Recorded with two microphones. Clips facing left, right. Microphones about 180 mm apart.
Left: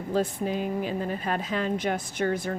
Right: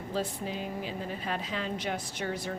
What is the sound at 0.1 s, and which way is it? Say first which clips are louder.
Speech: left 7 dB; 50° left (ahead or behind).